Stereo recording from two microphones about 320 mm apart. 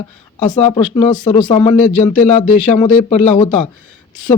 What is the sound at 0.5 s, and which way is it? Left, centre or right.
Speech, centre.